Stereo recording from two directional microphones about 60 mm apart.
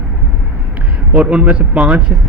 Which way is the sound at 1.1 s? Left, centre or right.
Centre.